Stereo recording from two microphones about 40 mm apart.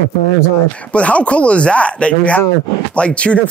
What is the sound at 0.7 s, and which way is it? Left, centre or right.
Speech, left.